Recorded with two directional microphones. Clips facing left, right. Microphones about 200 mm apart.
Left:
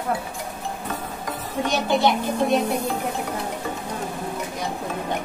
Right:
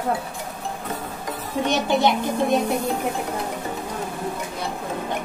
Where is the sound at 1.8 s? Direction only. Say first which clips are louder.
Left 2 dB; 15° right (ahead or behind).